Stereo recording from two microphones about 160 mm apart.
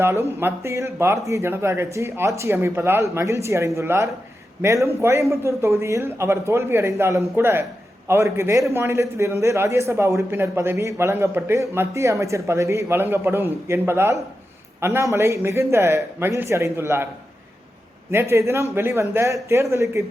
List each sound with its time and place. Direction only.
0.0 s speech: 15° right (ahead or behind)
18.1 s speech: 15° right (ahead or behind)